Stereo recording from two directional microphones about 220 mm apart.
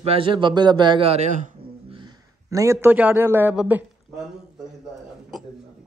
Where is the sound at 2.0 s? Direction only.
15° right (ahead or behind).